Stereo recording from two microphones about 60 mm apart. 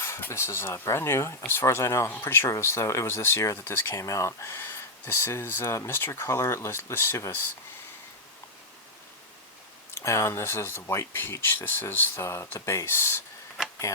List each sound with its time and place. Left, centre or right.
0.0 s speech: left
3.9 s speech: left
9.9 s speech: left